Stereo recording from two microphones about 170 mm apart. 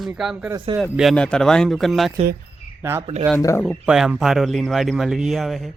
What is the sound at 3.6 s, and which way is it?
Speech, centre (ahead or behind).